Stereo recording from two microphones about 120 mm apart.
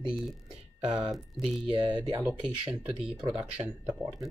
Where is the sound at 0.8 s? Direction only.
40° right (ahead or behind).